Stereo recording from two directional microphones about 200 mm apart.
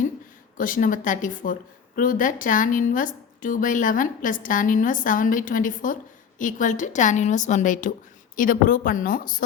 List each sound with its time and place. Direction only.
0.5 s a woman's voice: 45° left (ahead or behind)